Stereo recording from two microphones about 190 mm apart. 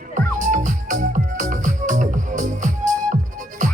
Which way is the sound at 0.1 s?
40° right (ahead or behind).